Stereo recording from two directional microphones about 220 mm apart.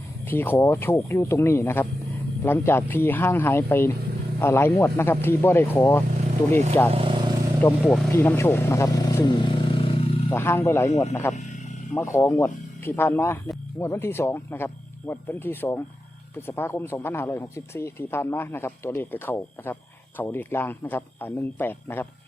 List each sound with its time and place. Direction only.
0.3 s speech: 10° left (ahead or behind)
6.9 s vehicle: 25° right (ahead or behind)
7.6 s speech: 10° left (ahead or behind)
10.3 s speech: 10° left (ahead or behind)